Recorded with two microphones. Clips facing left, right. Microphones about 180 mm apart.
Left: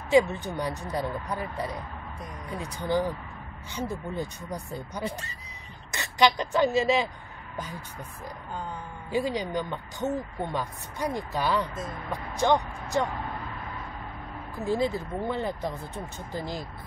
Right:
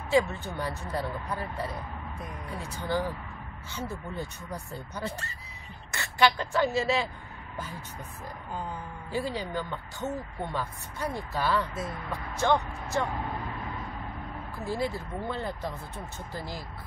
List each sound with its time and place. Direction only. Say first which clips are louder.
0.1 s speech: left 4 dB; 15° left (ahead or behind)
9.1 s speech: left 4 dB; 15° left (ahead or behind)
14.6 s speech: left 5 dB; 20° left (ahead or behind)